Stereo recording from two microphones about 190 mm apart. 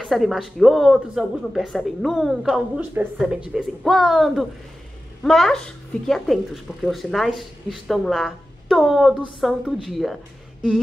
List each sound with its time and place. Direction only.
0.0 s speech: centre (ahead or behind)